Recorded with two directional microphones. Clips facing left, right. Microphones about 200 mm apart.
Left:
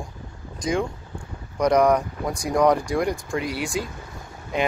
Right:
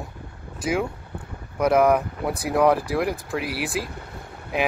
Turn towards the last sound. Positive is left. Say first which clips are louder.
# even
turn(degrees=-5)  # may be behind; listen again after turning